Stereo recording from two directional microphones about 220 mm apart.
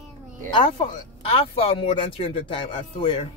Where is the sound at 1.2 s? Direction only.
25° left (ahead or behind).